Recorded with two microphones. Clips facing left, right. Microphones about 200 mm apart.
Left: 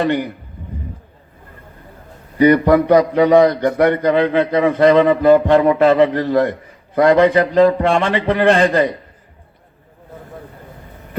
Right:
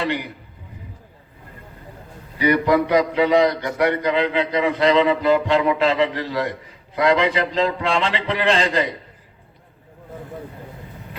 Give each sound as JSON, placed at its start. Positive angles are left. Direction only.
{"t": 0.0, "sound": "a man's voice", "side_deg": 50}
{"t": 2.4, "sound": "a man's voice", "side_deg": 50}